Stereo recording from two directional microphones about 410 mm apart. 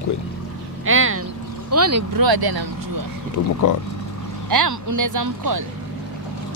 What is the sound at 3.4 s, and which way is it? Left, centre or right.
Speech, left.